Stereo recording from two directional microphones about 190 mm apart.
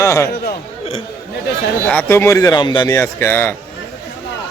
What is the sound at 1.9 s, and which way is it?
Speech, 10° left (ahead or behind).